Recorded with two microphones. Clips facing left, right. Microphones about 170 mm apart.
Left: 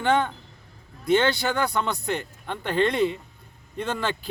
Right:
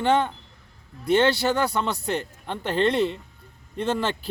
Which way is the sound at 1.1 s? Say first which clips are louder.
Right 2 dB; 30° right (ahead or behind).